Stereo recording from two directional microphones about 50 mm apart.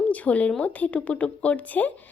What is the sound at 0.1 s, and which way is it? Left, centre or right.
Speech, left.